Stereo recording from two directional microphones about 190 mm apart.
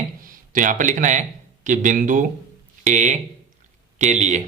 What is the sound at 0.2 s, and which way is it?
A man's voice, 45° right (ahead or behind).